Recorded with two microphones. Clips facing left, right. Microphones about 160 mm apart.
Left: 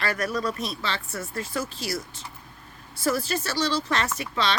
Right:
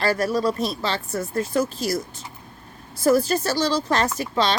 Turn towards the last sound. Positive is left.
turn(degrees=-40)  # may be behind; listen again after turning